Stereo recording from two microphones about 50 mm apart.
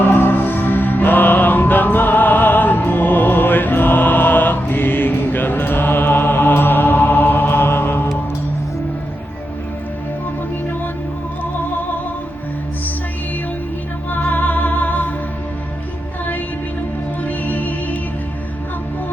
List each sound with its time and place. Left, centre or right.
0.0 s music: left
14.2 s music: left
17.2 s music: left